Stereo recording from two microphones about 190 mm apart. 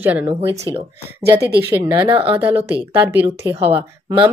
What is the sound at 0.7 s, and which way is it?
Speech, 15° left (ahead or behind).